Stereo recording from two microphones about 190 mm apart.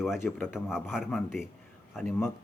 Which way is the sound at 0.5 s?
Centre (ahead or behind).